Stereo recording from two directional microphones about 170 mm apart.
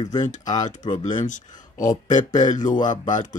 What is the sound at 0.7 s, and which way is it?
Speech, 45° left (ahead or behind).